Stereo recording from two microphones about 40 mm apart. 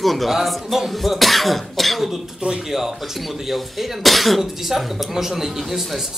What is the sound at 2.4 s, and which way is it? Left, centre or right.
Speech, right.